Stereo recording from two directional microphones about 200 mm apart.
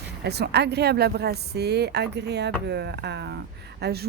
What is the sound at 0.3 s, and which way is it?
Speech, 55° right (ahead or behind).